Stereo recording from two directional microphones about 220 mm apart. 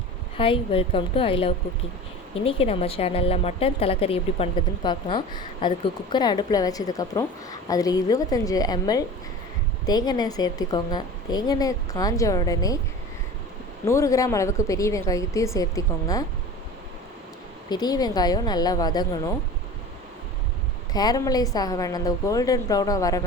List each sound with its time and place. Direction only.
0.3 s a woman's voice: 25° left (ahead or behind)
13.8 s a woman's voice: 15° left (ahead or behind)
17.7 s a woman's voice: 15° left (ahead or behind)
20.9 s a woman's voice: 15° left (ahead or behind)